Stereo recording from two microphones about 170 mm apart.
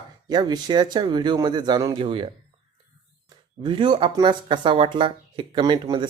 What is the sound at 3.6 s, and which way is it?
Speech, 30° right (ahead or behind).